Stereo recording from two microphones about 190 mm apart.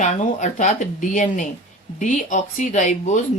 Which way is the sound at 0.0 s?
40° left (ahead or behind).